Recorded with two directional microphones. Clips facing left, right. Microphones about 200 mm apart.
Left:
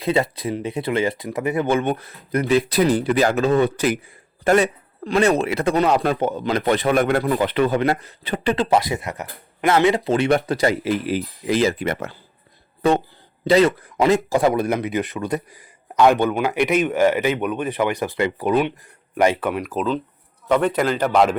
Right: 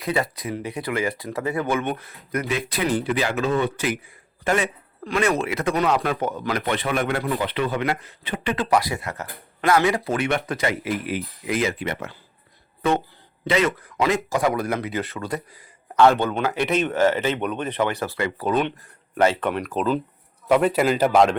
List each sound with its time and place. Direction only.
0.0 s speech: 25° left (ahead or behind)
6.7 s speech: 40° left (ahead or behind); by 10.2 s 25° left (ahead or behind)
10.2 s speech: 35° left (ahead or behind)
13.4 s a man's voice: 35° left (ahead or behind); by 21.2 s 10° right (ahead or behind)